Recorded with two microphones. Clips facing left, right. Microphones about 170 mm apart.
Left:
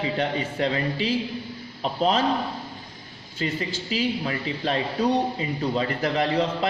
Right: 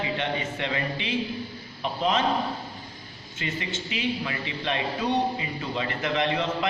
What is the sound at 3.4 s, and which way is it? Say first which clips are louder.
A man's voice: left 4 dB; 35° left (ahead or behind).